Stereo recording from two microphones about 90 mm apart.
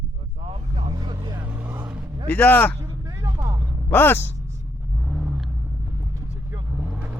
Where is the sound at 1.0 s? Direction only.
60° right (ahead or behind).